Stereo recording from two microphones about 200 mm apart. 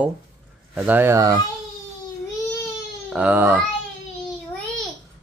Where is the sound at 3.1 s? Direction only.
10° right (ahead or behind).